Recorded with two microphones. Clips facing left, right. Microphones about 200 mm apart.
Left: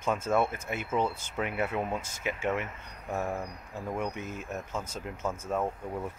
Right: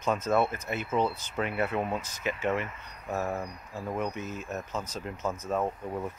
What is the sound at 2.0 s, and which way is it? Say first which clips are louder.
Speech: right 1 dB; 50° left (ahead or behind).